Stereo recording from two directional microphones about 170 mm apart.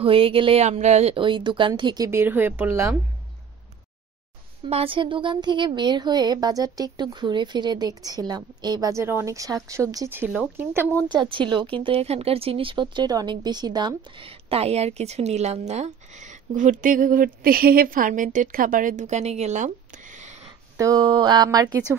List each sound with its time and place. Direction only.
0.0 s speech: 30° right (ahead or behind)
2.0 s speech: 15° right (ahead or behind)
4.6 s a woman's voice: 35° right (ahead or behind); by 10.9 s 15° right (ahead or behind)
11.2 s speech: 30° right (ahead or behind)
20.7 s a woman's voice: 20° right (ahead or behind)